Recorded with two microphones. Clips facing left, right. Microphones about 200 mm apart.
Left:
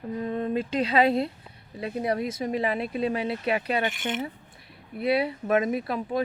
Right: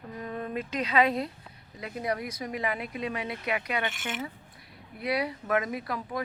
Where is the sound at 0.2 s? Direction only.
25° left (ahead or behind).